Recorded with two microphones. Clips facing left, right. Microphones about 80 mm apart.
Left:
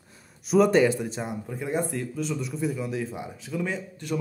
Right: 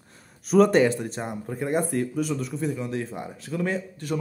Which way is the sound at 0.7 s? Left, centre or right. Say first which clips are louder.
Right 1 dB; right.